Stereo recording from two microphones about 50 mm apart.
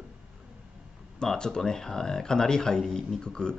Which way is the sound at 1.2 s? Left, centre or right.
Centre.